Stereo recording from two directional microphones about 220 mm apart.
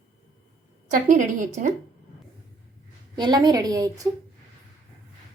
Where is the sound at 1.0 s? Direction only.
35° right (ahead or behind).